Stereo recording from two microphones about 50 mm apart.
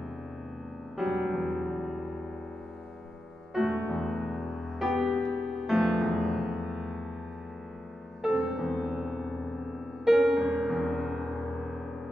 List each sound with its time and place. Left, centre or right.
0.9 s music: centre
3.5 s music: centre
8.3 s music: centre
8.5 s music: centre